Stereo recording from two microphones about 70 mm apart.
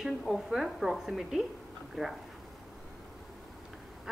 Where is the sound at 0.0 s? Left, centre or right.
Centre.